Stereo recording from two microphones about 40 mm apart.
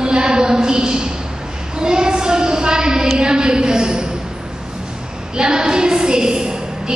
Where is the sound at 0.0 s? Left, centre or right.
Centre.